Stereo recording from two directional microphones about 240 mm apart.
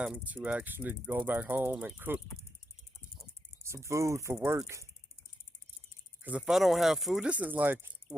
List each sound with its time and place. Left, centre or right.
0.0 s speech: centre
3.6 s speech: centre
6.2 s speech: centre